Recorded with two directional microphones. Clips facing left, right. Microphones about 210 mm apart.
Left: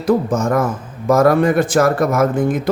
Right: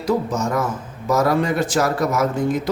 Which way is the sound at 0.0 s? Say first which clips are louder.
Left 5 dB; 55° left (ahead or behind).